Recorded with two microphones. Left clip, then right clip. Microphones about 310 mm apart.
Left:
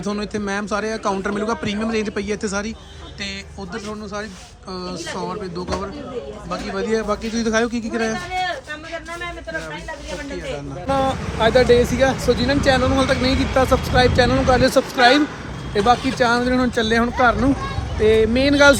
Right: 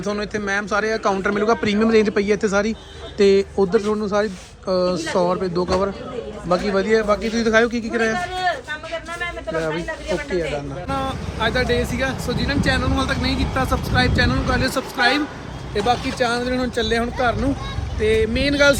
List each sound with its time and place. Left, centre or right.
0.0 s speech: centre
10.8 s speech: centre
15.7 s speech: centre